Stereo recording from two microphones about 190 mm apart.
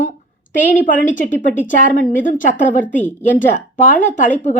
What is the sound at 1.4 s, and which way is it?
A woman's voice, 45° left (ahead or behind).